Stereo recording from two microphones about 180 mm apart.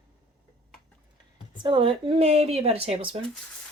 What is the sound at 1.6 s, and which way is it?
Speech, 25° right (ahead or behind).